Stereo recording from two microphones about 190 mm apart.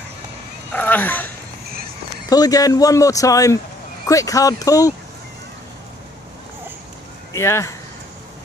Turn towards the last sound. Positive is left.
turn(degrees=15)  # may be behind; listen again after turning